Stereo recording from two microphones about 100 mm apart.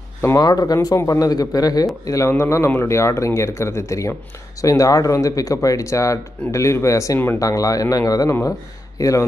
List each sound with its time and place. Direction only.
0.4 s speech: 40° left (ahead or behind)